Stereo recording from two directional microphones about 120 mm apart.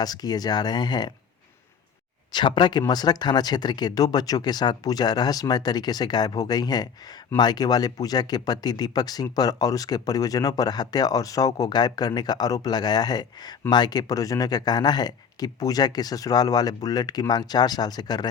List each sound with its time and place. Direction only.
0.0 s speech: 35° left (ahead or behind)
2.3 s speech: 40° left (ahead or behind)